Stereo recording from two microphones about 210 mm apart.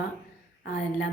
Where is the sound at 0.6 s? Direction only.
45° left (ahead or behind).